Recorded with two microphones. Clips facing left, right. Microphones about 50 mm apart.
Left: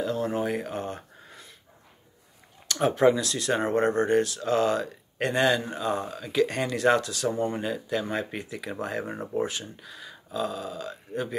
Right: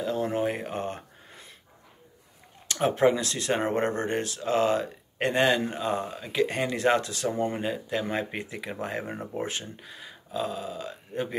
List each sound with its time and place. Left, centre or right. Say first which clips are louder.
0.0 s a sound: even; centre
3.0 s speech: left 2 dB; right
9.4 s speech: left 5 dB; right